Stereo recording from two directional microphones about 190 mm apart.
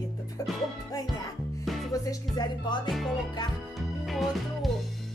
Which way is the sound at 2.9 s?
Centre (ahead or behind).